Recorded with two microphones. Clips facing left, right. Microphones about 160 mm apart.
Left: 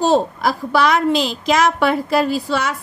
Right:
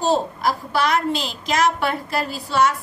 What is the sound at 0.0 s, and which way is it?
A woman's voice, 90° left.